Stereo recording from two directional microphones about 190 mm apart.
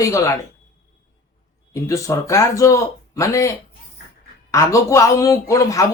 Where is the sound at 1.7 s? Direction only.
15° left (ahead or behind).